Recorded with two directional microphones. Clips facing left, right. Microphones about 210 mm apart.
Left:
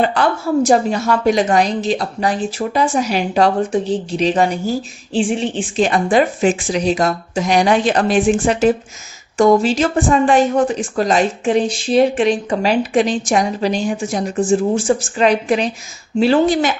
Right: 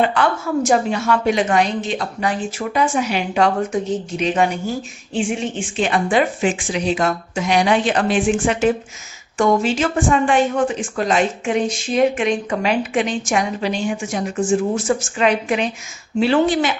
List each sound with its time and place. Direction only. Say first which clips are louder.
0.0 s speech: left 2 dB; 35° left (ahead or behind)